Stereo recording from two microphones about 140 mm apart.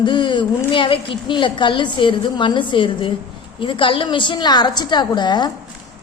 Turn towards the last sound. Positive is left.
turn(degrees=30)  # may be behind; listen again after turning